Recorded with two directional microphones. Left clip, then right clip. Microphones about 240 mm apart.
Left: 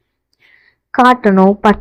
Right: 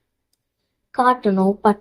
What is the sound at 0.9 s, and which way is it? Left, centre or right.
Speech, left.